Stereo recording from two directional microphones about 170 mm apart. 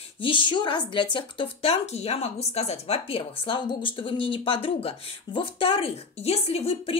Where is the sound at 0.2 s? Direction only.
30° left (ahead or behind).